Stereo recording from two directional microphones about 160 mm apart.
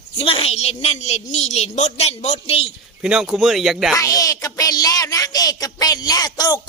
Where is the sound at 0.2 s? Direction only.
35° left (ahead or behind).